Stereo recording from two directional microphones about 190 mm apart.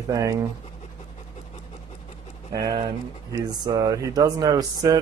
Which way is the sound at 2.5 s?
20° right (ahead or behind).